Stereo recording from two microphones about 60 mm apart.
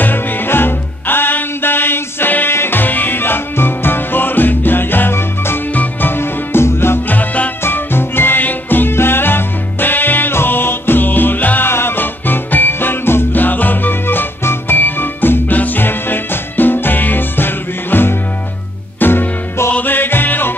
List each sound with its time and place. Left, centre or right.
0.0 s music: left
7.1 s music: left
7.6 s music: left